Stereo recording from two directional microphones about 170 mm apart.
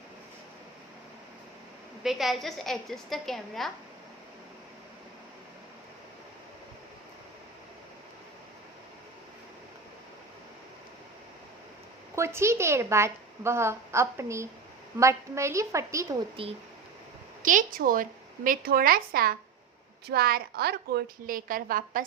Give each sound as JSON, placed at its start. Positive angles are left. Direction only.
{"t": 2.0, "sound": "a woman's voice", "side_deg": 0}
{"t": 12.1, "sound": "a woman's voice", "side_deg": -15}
{"t": 16.4, "sound": "speech", "side_deg": -35}
{"t": 17.4, "sound": "a woman's voice", "side_deg": -50}